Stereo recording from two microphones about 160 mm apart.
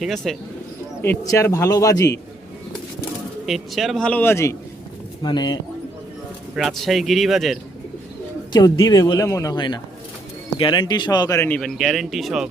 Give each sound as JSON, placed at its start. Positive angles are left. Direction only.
{"t": 0.0, "sound": "speech", "side_deg": 0}
{"t": 1.0, "sound": "a man's voice", "side_deg": 15}
{"t": 3.4, "sound": "speech", "side_deg": 0}
{"t": 5.2, "sound": "a man's voice", "side_deg": 25}
{"t": 6.6, "sound": "speech", "side_deg": 0}
{"t": 8.5, "sound": "a man's voice", "side_deg": 25}